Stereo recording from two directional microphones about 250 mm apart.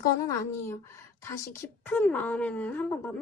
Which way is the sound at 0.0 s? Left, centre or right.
Centre.